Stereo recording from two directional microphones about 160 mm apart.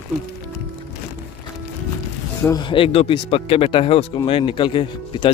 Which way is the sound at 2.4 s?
25° left (ahead or behind).